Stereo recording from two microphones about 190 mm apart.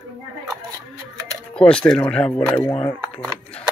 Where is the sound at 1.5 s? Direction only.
5° left (ahead or behind).